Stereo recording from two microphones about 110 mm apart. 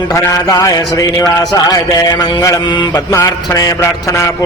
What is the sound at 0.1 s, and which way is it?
A man's voice, 30° left (ahead or behind).